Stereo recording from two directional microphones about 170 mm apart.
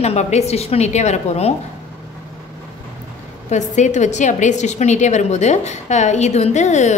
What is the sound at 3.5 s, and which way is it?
A woman's voice, 45° left (ahead or behind).